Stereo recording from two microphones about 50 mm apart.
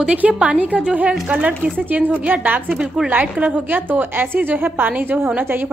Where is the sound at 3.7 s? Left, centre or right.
Right.